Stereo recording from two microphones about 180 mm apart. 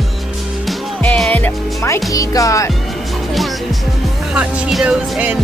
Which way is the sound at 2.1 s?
20° left (ahead or behind).